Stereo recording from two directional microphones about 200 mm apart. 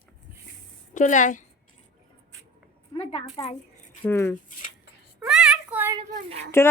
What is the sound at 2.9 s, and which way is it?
Speech, 30° left (ahead or behind).